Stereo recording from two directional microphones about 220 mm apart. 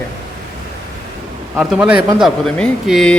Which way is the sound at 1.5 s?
5° right (ahead or behind).